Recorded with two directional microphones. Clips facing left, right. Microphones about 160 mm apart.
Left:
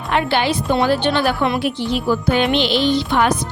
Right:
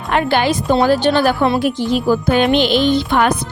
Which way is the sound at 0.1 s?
45° right (ahead or behind).